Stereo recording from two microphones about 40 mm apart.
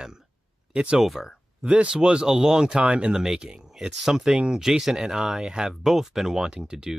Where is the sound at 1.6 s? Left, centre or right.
Right.